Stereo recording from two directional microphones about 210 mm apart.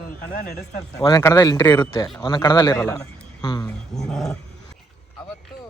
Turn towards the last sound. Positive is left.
turn(degrees=0)  # may be behind; listen again after turning